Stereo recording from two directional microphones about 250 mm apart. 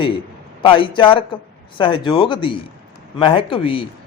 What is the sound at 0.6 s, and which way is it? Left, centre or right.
Speech, centre.